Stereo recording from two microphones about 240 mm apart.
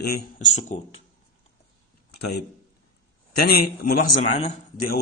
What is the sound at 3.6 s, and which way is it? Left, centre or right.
Speech, left.